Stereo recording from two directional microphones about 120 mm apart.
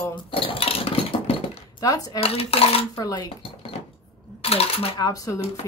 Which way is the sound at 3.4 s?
50° left (ahead or behind).